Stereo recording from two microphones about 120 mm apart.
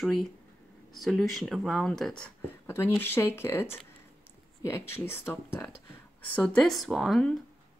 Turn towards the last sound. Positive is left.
turn(degrees=5)  # may be behind; listen again after turning